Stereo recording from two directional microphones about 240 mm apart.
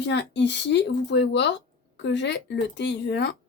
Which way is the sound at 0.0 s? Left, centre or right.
Left.